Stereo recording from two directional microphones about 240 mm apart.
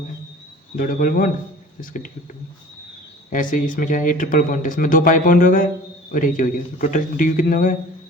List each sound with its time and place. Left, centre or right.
0.8 s speech: left
3.2 s speech: left